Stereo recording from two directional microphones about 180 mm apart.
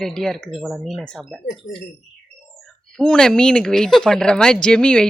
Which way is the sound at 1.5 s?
40° left (ahead or behind).